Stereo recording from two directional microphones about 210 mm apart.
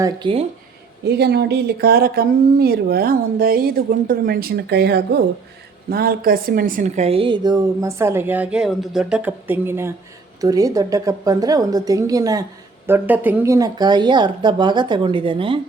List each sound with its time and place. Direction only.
0.0 s speech: 25° right (ahead or behind)
1.0 s a woman's voice: 50° right (ahead or behind); by 15.6 s 25° right (ahead or behind)